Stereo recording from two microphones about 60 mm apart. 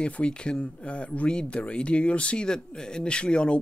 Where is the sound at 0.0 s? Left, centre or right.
Centre.